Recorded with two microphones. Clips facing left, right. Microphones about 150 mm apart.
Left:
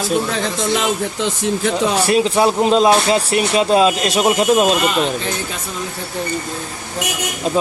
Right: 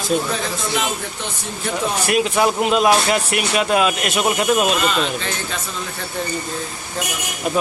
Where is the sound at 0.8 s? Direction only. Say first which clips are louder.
Left 5 dB; 85° left.